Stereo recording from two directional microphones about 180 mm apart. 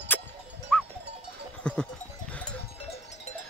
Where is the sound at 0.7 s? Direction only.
5° left (ahead or behind).